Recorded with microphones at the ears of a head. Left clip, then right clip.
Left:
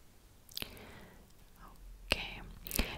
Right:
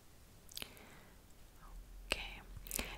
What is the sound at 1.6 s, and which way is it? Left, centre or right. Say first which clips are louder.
Whispering: left 6 dB; left.